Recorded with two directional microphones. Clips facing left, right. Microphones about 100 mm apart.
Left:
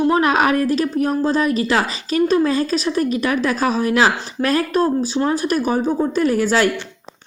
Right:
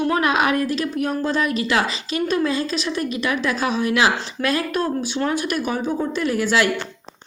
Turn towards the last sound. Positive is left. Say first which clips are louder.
# left 3 dB
turn(degrees=40)  # may be behind; listen again after turning